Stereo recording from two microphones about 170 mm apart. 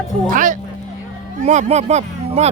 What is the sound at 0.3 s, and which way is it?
Speech, 50° right (ahead or behind).